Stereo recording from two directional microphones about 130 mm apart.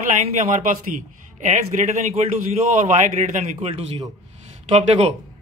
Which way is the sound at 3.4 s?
55° right (ahead or behind).